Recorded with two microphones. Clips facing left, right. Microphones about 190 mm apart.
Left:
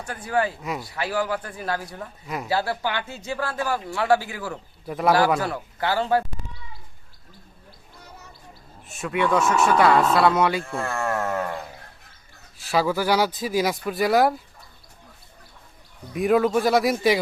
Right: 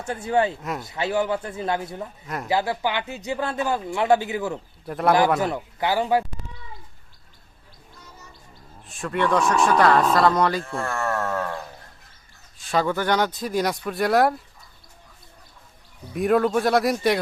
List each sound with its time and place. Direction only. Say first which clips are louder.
0.0 s speech: right 3 dB; 25° right (ahead or behind)
0.6 s speech: even; centre (ahead or behind)
0.9 s speech: right 3 dB; 20° right (ahead or behind)
2.2 s speech: left 4 dB; centre (ahead or behind)
2.5 s speech: right 2 dB; 15° right (ahead or behind)
4.9 s speech: even; centre (ahead or behind)
5.4 s speech: right 2 dB; 20° right (ahead or behind)
8.9 s speech: even; 5° left (ahead or behind)
16.1 s speech: even; centre (ahead or behind)